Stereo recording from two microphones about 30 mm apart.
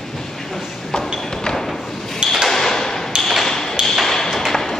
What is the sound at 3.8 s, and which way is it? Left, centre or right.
Tap, right.